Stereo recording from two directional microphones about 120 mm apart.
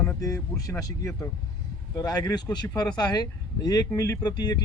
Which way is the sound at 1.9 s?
30° left (ahead or behind).